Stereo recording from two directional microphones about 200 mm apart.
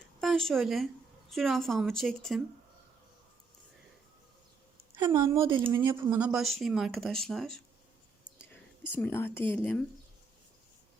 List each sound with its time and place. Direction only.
0.2 s speech: centre (ahead or behind)
5.1 s speech: 15° right (ahead or behind); by 9.8 s 5° left (ahead or behind)